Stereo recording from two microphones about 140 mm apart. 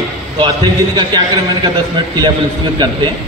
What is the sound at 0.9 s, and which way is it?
Speech, 30° right (ahead or behind).